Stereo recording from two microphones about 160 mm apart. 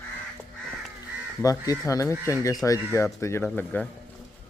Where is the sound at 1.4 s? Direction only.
20° left (ahead or behind).